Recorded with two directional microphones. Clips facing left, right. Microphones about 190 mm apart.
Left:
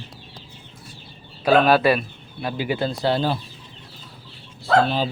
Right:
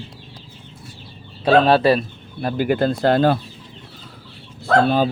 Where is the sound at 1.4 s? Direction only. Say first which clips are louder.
Right 2 dB; 30° right (ahead or behind).